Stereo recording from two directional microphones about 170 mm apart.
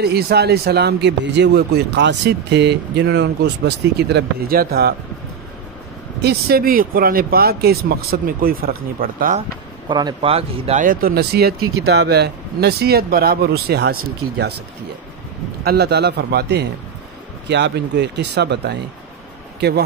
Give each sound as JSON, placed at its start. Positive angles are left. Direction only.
{"t": 0.0, "sound": "a man's voice", "side_deg": -70}
{"t": 6.2, "sound": "speech", "side_deg": -65}
{"t": 9.8, "sound": "speech", "side_deg": -25}
{"t": 10.8, "sound": "a man's voice", "side_deg": -55}
{"t": 15.6, "sound": "a man's voice", "side_deg": -70}
{"t": 17.5, "sound": "speech", "side_deg": -90}